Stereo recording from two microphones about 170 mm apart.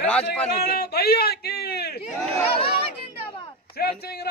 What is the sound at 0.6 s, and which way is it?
A man's voice, 65° left (ahead or behind).